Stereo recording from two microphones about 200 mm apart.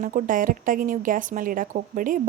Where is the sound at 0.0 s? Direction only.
40° right (ahead or behind).